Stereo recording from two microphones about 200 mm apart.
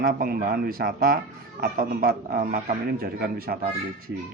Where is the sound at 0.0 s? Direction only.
50° right (ahead or behind).